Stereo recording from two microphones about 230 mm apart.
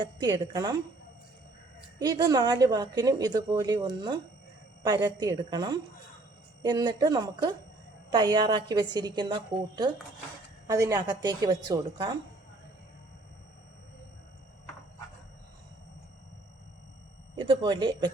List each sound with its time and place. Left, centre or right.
0.0 s a woman's voice: centre
2.0 s a woman's voice: centre
10.7 s a woman's voice: centre
17.3 s speech: right